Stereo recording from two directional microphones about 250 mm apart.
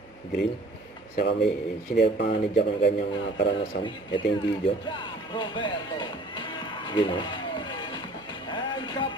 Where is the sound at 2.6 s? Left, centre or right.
Left.